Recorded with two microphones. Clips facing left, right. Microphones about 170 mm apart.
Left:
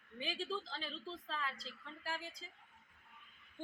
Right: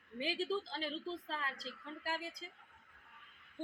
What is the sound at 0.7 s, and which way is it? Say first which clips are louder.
Speech: right 5 dB; 40° right (ahead or behind).